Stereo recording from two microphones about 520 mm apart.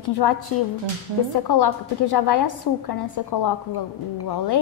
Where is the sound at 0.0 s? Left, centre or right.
Left.